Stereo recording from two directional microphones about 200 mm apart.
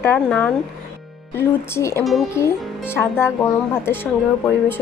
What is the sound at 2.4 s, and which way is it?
Speech, 10° left (ahead or behind).